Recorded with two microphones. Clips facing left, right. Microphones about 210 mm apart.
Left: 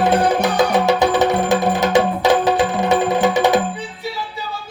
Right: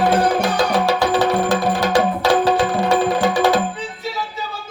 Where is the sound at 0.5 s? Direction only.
20° left (ahead or behind).